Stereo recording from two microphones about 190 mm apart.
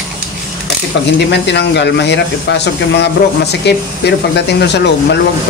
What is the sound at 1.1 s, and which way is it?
Speech, 65° left (ahead or behind).